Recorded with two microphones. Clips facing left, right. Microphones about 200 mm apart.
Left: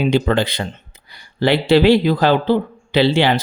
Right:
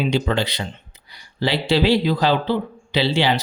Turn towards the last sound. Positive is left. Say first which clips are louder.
# left 5 dB
turn(degrees=55)  # may be behind; listen again after turning